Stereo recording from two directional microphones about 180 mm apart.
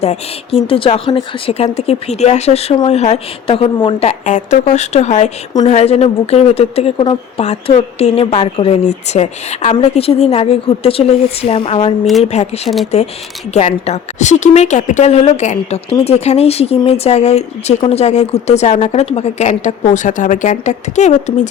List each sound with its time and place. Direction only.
0.0 s a woman's voice: 35° left (ahead or behind)
4.1 s a woman's voice: 45° left (ahead or behind)
12.6 s speech: centre (ahead or behind)
13.5 s a woman's voice: 35° left (ahead or behind)